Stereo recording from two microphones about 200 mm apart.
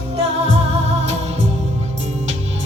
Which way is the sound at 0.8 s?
35° right (ahead or behind).